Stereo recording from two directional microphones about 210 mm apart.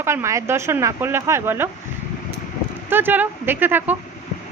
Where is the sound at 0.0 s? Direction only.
15° right (ahead or behind).